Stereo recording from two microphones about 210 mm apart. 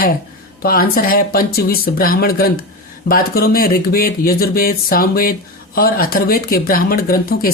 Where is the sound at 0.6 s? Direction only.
45° left (ahead or behind).